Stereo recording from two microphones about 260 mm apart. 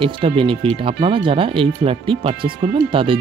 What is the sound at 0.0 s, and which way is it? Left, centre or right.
Speech, centre.